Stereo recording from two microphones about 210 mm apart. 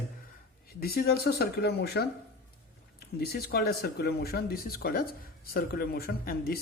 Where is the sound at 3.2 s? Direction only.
45° left (ahead or behind).